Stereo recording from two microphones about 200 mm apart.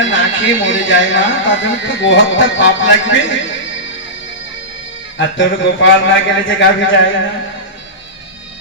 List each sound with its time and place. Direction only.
0.0 s speech: 70° left (ahead or behind)
5.1 s speech: 65° left (ahead or behind)